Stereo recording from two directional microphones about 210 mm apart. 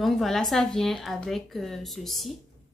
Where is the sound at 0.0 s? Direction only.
Centre (ahead or behind).